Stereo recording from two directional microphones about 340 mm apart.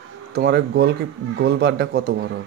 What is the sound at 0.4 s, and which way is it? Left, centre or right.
Speech, right.